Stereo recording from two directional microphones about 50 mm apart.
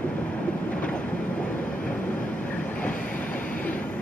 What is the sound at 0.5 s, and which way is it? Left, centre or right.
Train, left.